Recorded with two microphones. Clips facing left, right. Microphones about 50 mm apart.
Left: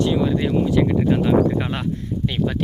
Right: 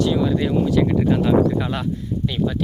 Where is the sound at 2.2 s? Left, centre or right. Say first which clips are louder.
Even; left.